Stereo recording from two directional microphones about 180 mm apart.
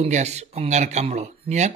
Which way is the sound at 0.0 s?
40° right (ahead or behind).